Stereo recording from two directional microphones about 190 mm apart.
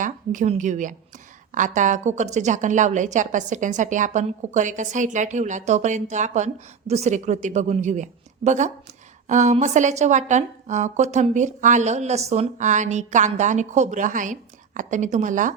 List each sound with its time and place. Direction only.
0.0 s a woman's voice: 40° right (ahead or behind)